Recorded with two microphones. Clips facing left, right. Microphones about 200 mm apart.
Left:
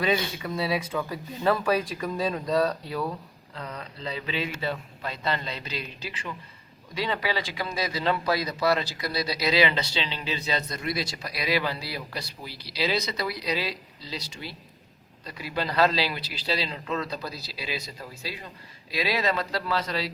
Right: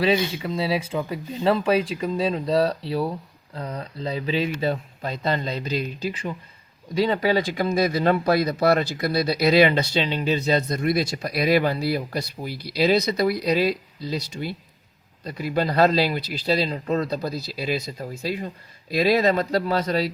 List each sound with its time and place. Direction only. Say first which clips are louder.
0.4 s speech: right 3 dB; 25° right (ahead or behind); by 20.1 s 45° right (ahead or behind)